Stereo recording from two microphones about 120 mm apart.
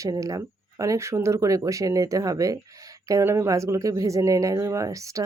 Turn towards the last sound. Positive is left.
turn(degrees=-25)  # may be behind; listen again after turning